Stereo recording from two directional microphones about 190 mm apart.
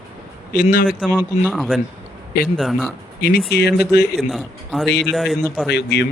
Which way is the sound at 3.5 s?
60° left (ahead or behind).